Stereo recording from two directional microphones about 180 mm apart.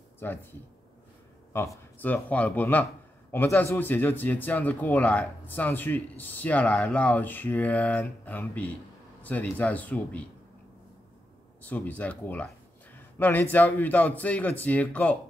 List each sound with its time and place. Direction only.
0.2 s a man's voice: 10° left (ahead or behind)
2.0 s a man's voice: 10° left (ahead or behind)
11.6 s a man's voice: 10° left (ahead or behind)